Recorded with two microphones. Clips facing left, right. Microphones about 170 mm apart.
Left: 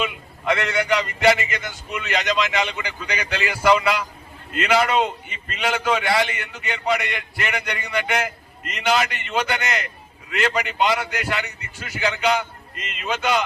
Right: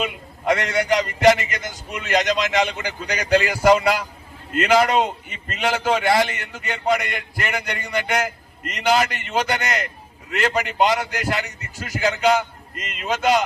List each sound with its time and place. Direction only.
0.0 s a man's voice: 45° right (ahead or behind)